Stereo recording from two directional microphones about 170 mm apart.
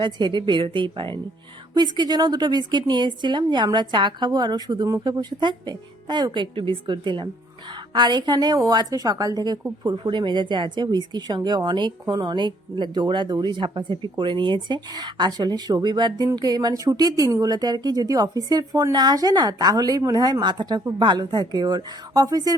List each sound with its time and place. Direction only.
0.0 s speech: 25° right (ahead or behind)